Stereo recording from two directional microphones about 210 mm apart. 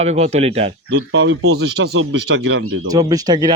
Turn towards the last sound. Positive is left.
turn(degrees=-20)  # may be behind; listen again after turning